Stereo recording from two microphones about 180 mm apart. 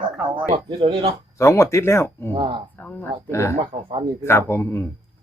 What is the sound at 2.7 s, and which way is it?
Speech, 10° left (ahead or behind).